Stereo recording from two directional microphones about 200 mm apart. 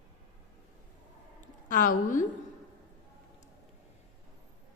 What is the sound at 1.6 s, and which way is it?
Speech, 40° left (ahead or behind).